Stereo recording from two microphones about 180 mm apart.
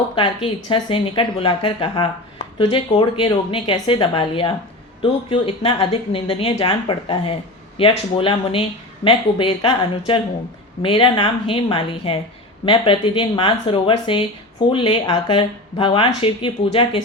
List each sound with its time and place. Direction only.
0.2 s speech: 30° left (ahead or behind)